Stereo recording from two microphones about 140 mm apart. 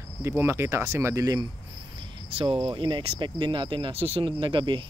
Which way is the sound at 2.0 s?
40° right (ahead or behind).